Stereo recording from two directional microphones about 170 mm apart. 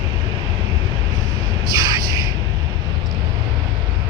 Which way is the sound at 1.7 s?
20° right (ahead or behind).